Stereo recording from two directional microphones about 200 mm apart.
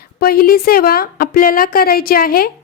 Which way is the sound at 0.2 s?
45° left (ahead or behind).